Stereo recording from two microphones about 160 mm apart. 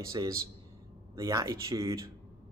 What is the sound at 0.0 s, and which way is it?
A man's voice, 20° right (ahead or behind).